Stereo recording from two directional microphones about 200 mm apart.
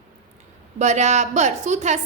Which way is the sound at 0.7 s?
35° right (ahead or behind).